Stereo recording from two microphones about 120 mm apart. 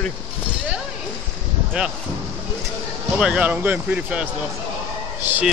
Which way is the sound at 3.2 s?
10° right (ahead or behind).